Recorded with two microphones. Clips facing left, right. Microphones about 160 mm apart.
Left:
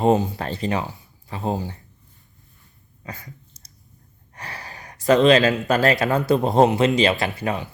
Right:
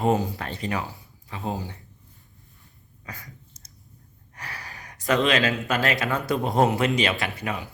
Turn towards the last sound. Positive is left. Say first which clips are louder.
# left 5 dB
turn(degrees=35)  # may be behind; listen again after turning